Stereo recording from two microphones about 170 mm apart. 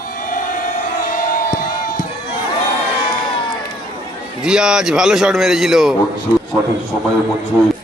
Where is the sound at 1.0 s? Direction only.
55° left (ahead or behind).